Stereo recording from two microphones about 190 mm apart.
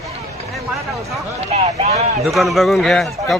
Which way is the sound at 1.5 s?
35° right (ahead or behind).